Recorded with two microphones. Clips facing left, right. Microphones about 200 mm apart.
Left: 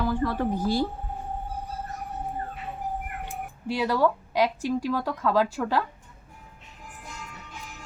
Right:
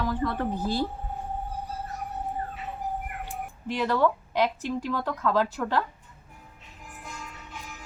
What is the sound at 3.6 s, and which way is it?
Speech, 10° left (ahead or behind).